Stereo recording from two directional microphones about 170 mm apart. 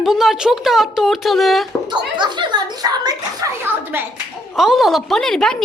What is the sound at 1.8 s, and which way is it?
A child's voice, 25° right (ahead or behind).